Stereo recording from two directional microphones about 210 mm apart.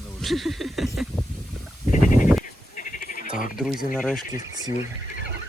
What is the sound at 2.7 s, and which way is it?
Sheep, 40° left (ahead or behind).